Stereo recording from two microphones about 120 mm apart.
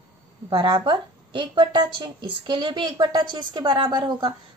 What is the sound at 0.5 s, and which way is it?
A woman's voice, 45° right (ahead or behind).